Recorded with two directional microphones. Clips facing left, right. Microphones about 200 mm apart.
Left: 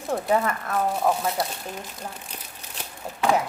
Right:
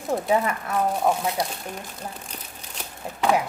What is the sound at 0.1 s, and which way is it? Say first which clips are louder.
Speech: right 1 dB; 5° right (ahead or behind).